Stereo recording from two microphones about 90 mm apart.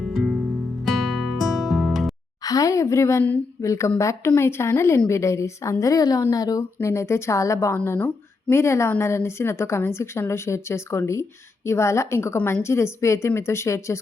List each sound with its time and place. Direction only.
0.0 s music: centre (ahead or behind)
2.4 s a woman's voice: 40° left (ahead or behind)
6.6 s a woman's voice: 30° left (ahead or behind)
7.9 s a sound: 15° left (ahead or behind)
8.5 s a woman's voice: 30° left (ahead or behind)